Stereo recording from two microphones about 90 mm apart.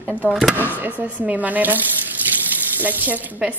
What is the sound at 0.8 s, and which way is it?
A woman's voice, 20° right (ahead or behind).